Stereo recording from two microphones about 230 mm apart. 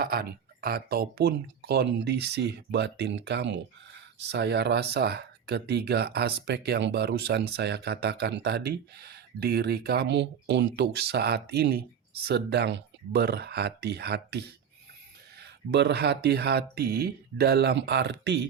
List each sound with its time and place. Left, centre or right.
0.0 s speech: right